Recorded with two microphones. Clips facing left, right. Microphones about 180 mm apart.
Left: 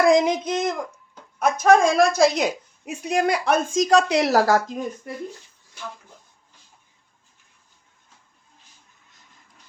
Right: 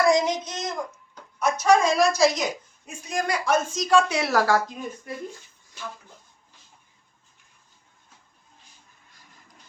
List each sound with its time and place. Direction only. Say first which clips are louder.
0.0 s a woman's voice: left 4 dB; 55° left (ahead or behind); by 4.6 s 40° left (ahead or behind)